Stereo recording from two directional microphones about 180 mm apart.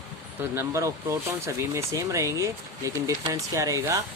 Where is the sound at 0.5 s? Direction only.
15° right (ahead or behind).